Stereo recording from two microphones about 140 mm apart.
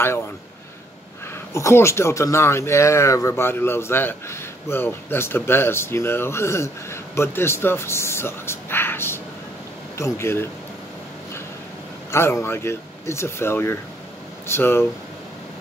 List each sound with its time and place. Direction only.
1.5 s speech: 20° left (ahead or behind)
12.1 s speech: 20° left (ahead or behind)